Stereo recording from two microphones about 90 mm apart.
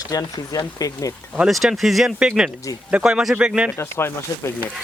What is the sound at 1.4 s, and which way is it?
Speech, 5° right (ahead or behind).